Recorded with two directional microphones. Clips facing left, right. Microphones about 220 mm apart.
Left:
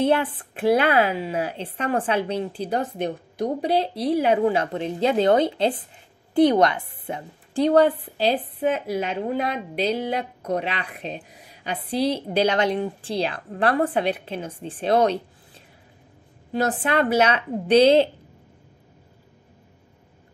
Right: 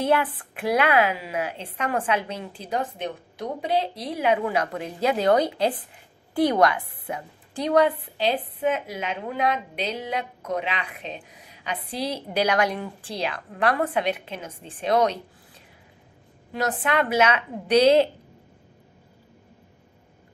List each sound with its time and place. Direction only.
0.0 s a woman's voice: 30° left (ahead or behind)
16.5 s speech: 30° left (ahead or behind)